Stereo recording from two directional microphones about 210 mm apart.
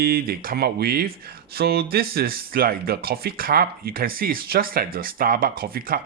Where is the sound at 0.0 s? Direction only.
45° right (ahead or behind).